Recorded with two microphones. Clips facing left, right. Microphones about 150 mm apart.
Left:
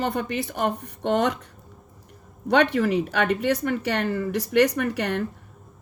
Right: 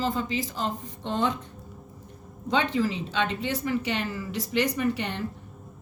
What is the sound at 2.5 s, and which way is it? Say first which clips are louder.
Speech: left 5 dB; 70° left (ahead or behind).